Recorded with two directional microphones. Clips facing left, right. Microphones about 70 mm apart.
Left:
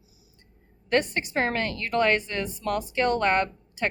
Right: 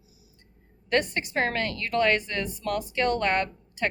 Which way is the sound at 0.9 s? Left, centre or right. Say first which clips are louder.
Left 1 dB; left.